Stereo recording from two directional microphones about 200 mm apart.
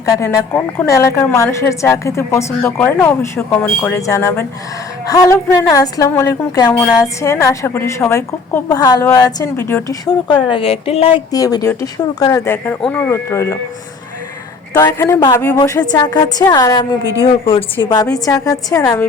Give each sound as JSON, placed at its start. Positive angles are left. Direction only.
{"t": 0.0, "sound": "a woman's voice", "side_deg": 15}
{"t": 11.3, "sound": "a woman's voice", "side_deg": 20}
{"t": 14.7, "sound": "a woman's voice", "side_deg": 15}